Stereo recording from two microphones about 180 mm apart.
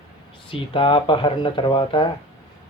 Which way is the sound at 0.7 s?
30° left (ahead or behind).